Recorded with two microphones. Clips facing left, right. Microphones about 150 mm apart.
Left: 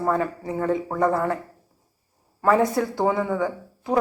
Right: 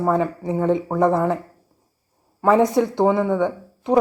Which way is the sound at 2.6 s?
20° right (ahead or behind).